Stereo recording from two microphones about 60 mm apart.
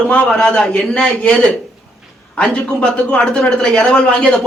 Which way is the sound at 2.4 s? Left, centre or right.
Centre.